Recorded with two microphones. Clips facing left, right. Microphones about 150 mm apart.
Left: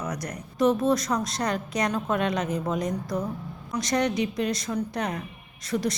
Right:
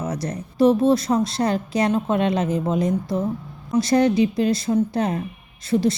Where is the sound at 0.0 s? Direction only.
25° right (ahead or behind).